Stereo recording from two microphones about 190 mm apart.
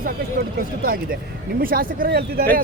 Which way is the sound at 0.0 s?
50° right (ahead or behind).